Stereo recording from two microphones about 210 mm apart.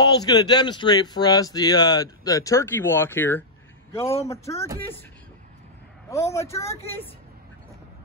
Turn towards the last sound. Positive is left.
turn(degrees=15)  # may be behind; listen again after turning